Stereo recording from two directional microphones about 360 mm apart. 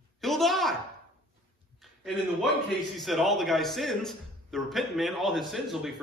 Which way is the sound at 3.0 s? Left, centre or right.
Centre.